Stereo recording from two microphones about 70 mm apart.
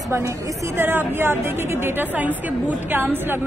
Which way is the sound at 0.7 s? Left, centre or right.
Right.